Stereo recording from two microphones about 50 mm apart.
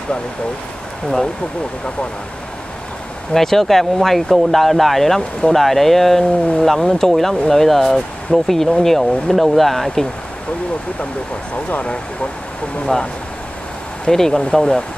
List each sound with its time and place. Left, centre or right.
3.3 s speech: centre
11.5 s speech: left
12.8 s speech: centre